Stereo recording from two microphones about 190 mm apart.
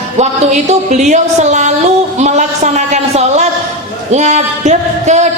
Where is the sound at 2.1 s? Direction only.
35° right (ahead or behind).